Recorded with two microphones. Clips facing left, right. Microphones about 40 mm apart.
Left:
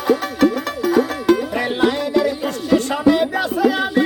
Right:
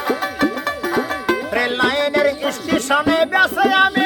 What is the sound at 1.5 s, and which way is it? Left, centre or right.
Music, right.